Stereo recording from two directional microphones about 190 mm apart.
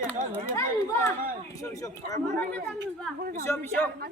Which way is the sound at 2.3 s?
5° left (ahead or behind).